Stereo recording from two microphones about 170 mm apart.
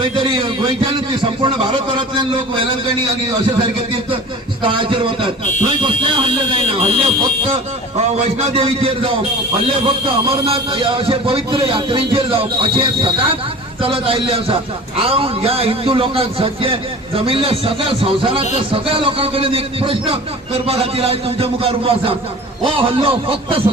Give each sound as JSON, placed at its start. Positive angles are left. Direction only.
{"t": 0.0, "sound": "a man's voice", "side_deg": -30}
{"t": 4.6, "sound": "speech", "side_deg": -30}